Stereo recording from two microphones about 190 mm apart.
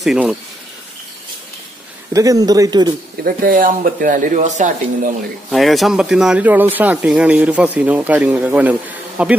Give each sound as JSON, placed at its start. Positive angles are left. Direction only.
{"t": 0.0, "sound": "speech", "side_deg": -5}
{"t": 2.1, "sound": "speech", "side_deg": -20}
{"t": 3.3, "sound": "speech", "side_deg": -50}
{"t": 5.5, "sound": "speech", "side_deg": 0}